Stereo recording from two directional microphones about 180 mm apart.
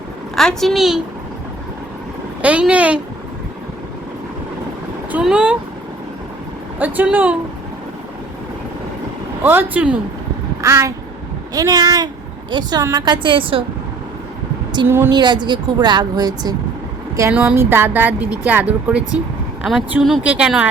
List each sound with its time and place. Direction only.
0.3 s speech: centre (ahead or behind)
2.4 s speech: 5° right (ahead or behind)
5.1 s speech: 5° right (ahead or behind)
6.7 s speech: 10° right (ahead or behind)
9.4 s speech: 10° right (ahead or behind)
10.6 s a sound: 15° right (ahead or behind)
11.5 s a woman's voice: 20° right (ahead or behind)
14.8 s speech: 15° right (ahead or behind)
15.1 s a woman's voice: 25° right (ahead or behind)
17.3 s speech: 10° right (ahead or behind)